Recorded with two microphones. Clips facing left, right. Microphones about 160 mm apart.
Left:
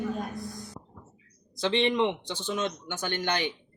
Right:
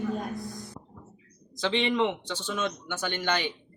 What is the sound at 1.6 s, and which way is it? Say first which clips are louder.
Speech: left 1 dB; 15° left (ahead or behind).